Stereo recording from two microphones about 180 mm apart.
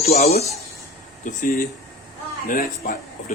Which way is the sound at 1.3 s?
50° left (ahead or behind).